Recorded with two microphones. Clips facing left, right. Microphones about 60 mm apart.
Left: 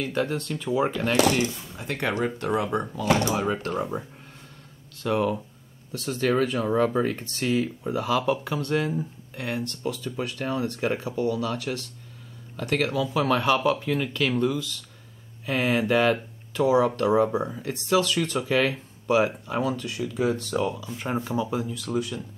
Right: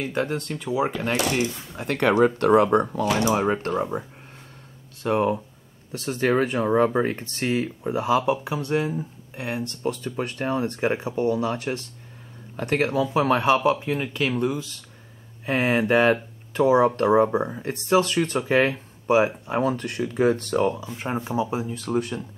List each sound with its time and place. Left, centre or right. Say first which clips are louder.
0.0 s speech: right 1 dB; right
0.6 s speech: even; centre
1.5 s speech: right 4 dB; right
3.3 s speech: right 4 dB; right
5.0 s speech: right 2 dB; right
9.8 s speech: right 4 dB; right
19.6 s speech: right 3 dB; right
20.8 s speech: right 1 dB; right
21.6 s speech: right 3 dB; right